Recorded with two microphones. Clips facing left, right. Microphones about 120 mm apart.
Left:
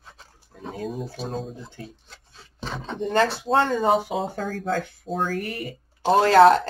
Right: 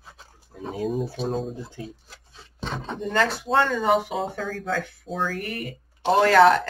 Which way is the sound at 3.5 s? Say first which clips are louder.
Right 1 dB; 40° left (ahead or behind).